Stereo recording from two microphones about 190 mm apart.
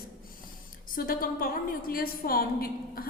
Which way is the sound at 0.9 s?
50° left (ahead or behind).